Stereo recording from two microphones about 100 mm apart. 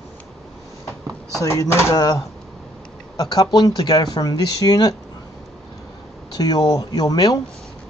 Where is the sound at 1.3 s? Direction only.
30° left (ahead or behind).